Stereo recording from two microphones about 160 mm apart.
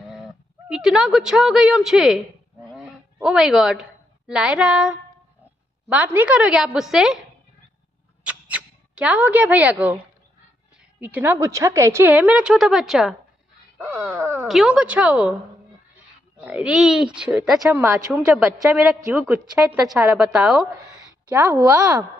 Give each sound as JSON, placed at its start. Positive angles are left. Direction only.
{"t": 0.7, "sound": "speech", "side_deg": -5}
{"t": 2.7, "sound": "a sound", "side_deg": -5}
{"t": 4.3, "sound": "a woman's voice", "side_deg": -5}
{"t": 8.2, "sound": "speech", "side_deg": -10}
{"t": 11.0, "sound": "a woman's voice", "side_deg": -10}
{"t": 14.1, "sound": "a sound", "side_deg": -20}
{"t": 14.5, "sound": "a woman's voice", "side_deg": -5}
{"t": 16.4, "sound": "a woman's voice", "side_deg": -5}